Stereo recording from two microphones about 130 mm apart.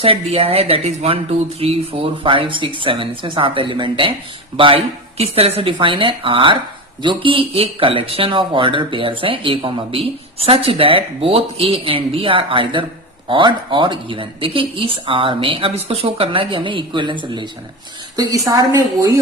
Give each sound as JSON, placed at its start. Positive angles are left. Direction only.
{"t": 0.0, "sound": "speech", "side_deg": -50}
{"t": 5.7, "sound": "speech", "side_deg": -40}
{"t": 18.2, "sound": "a woman's voice", "side_deg": -25}